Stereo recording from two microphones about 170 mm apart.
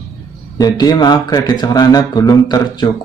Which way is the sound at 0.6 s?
25° left (ahead or behind).